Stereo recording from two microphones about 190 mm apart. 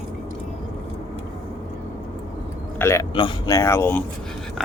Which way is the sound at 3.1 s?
20° left (ahead or behind).